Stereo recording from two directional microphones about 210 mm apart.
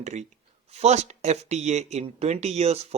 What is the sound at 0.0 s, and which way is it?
Speech, 35° right (ahead or behind).